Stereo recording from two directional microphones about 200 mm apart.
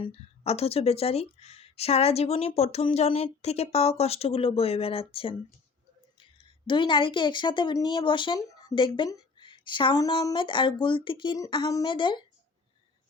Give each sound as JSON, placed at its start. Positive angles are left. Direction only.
{"t": 0.0, "sound": "speech", "side_deg": 30}